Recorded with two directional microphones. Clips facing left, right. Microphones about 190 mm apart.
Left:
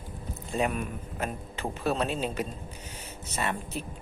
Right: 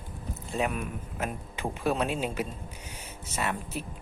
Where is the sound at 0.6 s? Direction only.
Centre (ahead or behind).